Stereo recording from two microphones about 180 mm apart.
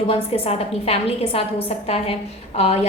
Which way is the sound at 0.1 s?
35° left (ahead or behind).